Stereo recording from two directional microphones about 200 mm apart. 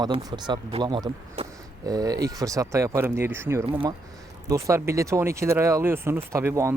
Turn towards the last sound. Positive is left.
turn(degrees=-15)  # may be behind; listen again after turning